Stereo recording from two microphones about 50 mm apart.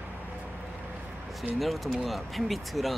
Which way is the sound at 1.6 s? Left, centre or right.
Centre.